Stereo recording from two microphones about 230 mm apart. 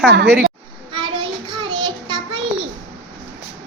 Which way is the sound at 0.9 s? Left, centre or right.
Right.